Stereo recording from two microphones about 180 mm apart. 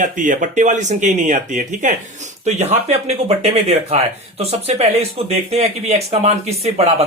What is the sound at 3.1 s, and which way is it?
Speech, 35° right (ahead or behind).